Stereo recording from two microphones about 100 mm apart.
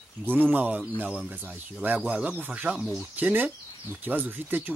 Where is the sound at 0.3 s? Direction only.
15° right (ahead or behind).